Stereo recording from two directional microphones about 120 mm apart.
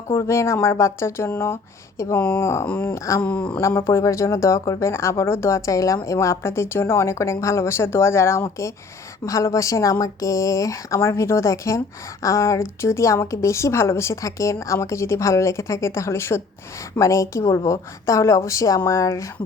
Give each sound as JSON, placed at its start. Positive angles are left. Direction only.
{"t": 0.1, "sound": "speech", "side_deg": 25}